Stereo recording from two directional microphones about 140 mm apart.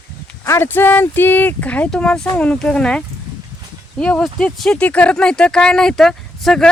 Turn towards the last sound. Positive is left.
turn(degrees=5)  # may be behind; listen again after turning